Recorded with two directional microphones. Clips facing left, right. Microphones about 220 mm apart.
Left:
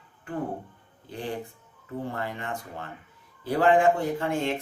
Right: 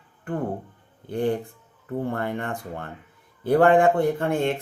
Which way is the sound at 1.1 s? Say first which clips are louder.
Right 9 dB; 55° right (ahead or behind).